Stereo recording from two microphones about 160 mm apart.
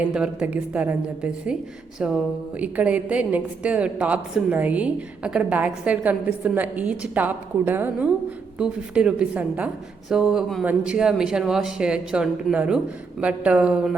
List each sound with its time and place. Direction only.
0.0 s a woman's voice: 5° right (ahead or behind)